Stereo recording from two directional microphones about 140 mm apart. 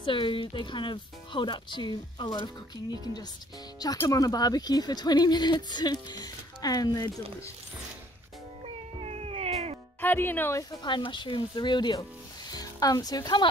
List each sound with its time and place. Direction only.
0.0 s speech: 35° left (ahead or behind)
8.6 s cat: 50° right (ahead or behind)
9.9 s speech: 15° left (ahead or behind); by 13.5 s 30° left (ahead or behind)